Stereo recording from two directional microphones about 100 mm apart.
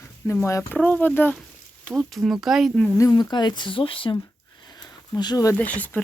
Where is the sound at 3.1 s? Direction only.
45° left (ahead or behind).